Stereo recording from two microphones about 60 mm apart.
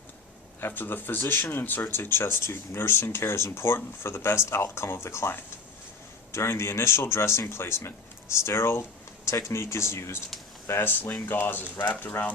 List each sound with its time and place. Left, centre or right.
0.6 s speech: left
6.3 s speech: left